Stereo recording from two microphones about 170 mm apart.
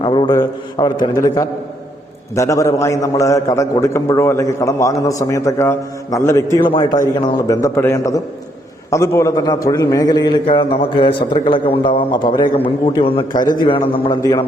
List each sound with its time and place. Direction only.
0.0 s a man's voice: 30° left (ahead or behind)
6.7 s a man's voice: 30° left (ahead or behind)